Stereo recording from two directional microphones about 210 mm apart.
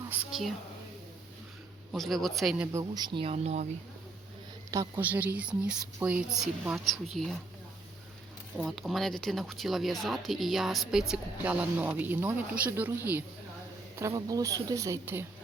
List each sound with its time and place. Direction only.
0.3 s a woman's voice: centre (ahead or behind)
1.9 s speech: centre (ahead or behind)
2.7 s speech: 20° right (ahead or behind)
4.7 s speech: 10° right (ahead or behind)
8.5 s speech: centre (ahead or behind)